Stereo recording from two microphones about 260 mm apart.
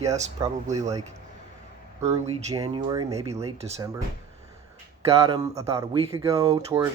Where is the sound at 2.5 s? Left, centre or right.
Centre.